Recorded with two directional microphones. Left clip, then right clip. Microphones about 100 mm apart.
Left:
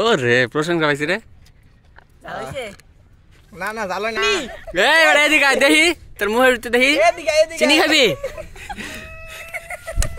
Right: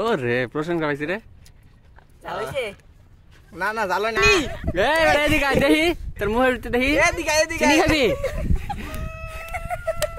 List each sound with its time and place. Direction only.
0.0 s speech: 10° left (ahead or behind)
2.2 s speech: 5° right (ahead or behind)
3.5 s speech: 25° right (ahead or behind)
4.5 s speech: 65° right (ahead or behind)
4.7 s speech: 10° left (ahead or behind)
7.0 s speech: 45° right (ahead or behind)
7.7 s speech: 5° left (ahead or behind)
8.5 s a sound: centre (ahead or behind)